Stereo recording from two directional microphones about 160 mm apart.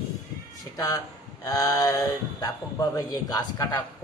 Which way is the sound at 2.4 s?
20° left (ahead or behind).